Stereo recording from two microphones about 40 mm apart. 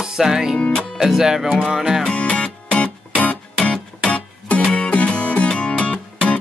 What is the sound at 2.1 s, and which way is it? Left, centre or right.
Music, left.